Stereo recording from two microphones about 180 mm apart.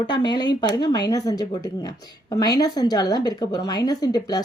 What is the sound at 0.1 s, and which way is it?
Speech, 25° left (ahead or behind).